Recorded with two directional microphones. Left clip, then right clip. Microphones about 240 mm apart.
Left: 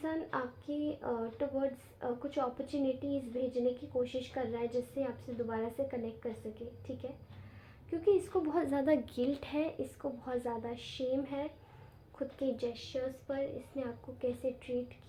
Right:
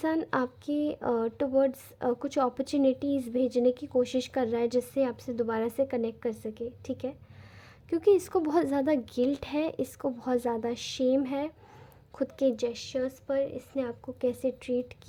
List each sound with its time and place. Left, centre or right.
0.0 s a woman's voice: right